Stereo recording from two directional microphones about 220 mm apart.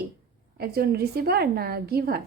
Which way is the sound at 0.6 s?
45° right (ahead or behind).